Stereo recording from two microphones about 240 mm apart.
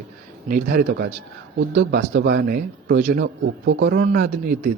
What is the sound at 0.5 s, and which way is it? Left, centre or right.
Speech, right.